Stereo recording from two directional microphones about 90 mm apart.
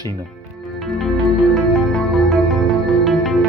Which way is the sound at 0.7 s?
Centre (ahead or behind).